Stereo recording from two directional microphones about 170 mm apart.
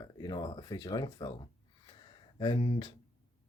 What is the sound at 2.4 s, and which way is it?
Speech, 30° left (ahead or behind).